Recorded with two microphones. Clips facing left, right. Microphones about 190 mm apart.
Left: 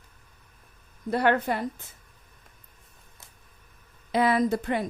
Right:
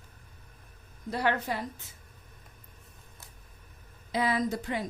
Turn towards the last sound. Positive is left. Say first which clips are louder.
# left 6 dB
turn(degrees=60)  # may be behind; listen again after turning